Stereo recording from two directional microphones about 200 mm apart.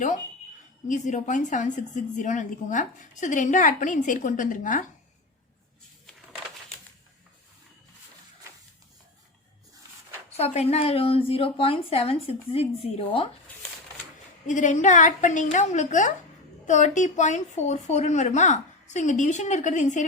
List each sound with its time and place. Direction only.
0.9 s a woman's voice: 40° left (ahead or behind)
10.3 s a woman's voice: 30° left (ahead or behind)
13.5 s shuffling cards: 10° left (ahead or behind)
14.4 s a woman's voice: 40° left (ahead or behind)